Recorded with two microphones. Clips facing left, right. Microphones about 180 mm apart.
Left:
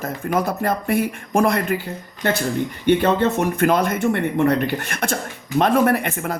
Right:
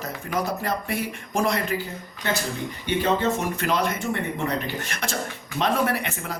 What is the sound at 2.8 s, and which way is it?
Speech, 55° left (ahead or behind).